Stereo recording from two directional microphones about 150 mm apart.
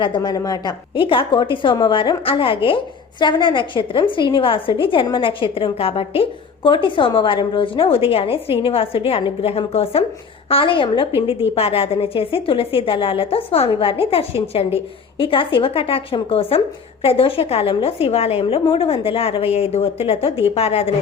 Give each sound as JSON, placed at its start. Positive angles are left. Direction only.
{"t": 0.0, "sound": "a woman's voice", "side_deg": 30}